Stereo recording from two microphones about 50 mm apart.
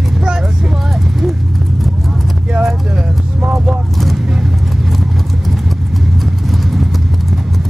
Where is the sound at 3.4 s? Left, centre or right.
Right.